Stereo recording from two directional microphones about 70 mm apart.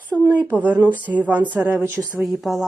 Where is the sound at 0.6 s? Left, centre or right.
Right.